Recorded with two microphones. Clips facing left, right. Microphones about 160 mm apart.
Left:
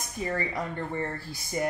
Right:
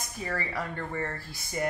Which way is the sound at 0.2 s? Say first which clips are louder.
Left 3 dB; 20° left (ahead or behind).